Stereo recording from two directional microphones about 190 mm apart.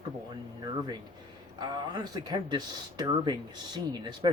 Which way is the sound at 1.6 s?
20° right (ahead or behind).